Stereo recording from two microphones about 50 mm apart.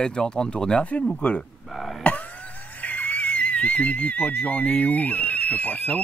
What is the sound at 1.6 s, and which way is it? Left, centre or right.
Speech, centre.